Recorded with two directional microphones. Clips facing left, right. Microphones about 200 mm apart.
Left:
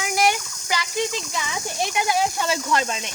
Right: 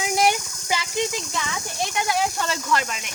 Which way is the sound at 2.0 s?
5° left (ahead or behind).